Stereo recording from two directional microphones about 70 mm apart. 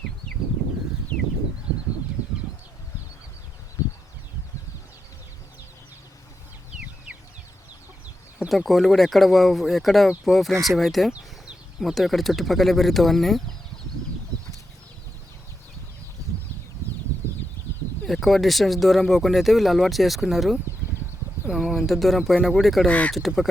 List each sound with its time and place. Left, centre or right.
2.2 s bird: right
8.4 s speech: centre
14.3 s chicken: right
18.0 s speech: centre
21.6 s speech: centre
22.9 s speech: centre
23.1 s speech: centre